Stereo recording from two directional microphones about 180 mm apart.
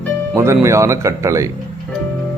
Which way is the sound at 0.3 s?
15° right (ahead or behind).